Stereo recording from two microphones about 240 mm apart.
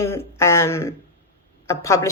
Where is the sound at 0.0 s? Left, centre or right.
Centre.